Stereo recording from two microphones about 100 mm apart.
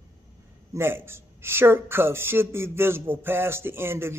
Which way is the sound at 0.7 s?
25° right (ahead or behind).